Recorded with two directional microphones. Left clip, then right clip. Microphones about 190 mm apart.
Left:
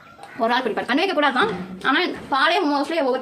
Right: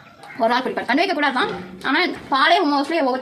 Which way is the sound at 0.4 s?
10° right (ahead or behind).